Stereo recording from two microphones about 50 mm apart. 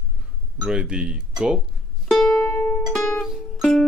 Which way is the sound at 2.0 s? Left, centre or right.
Centre.